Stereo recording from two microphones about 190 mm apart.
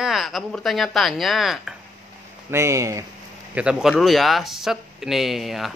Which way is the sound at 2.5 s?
15° right (ahead or behind).